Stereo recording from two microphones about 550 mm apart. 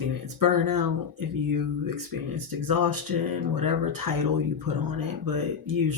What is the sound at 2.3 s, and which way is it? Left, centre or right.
Speech, right.